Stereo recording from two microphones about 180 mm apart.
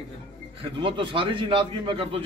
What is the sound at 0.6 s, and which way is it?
A man's voice, 25° right (ahead or behind).